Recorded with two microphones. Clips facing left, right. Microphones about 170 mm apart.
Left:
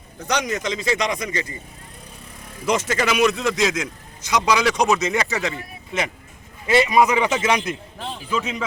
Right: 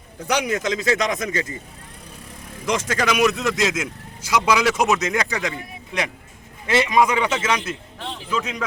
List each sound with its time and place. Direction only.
0.3 s a man's voice: 10° right (ahead or behind)
2.6 s a man's voice: 5° left (ahead or behind)
7.3 s a man's voice: 20° left (ahead or behind)
8.3 s a man's voice: 5° left (ahead or behind)